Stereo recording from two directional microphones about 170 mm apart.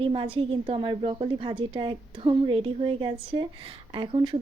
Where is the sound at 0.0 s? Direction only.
30° right (ahead or behind).